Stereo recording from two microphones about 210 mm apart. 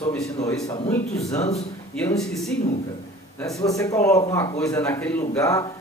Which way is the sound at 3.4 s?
15° left (ahead or behind).